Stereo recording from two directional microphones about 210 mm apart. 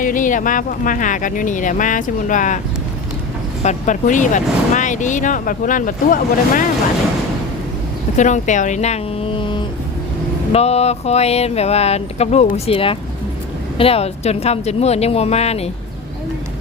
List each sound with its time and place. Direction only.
0.0 s speech: 40° left (ahead or behind)
3.6 s speech: 35° left (ahead or behind)
8.1 s a woman's voice: 35° left (ahead or behind)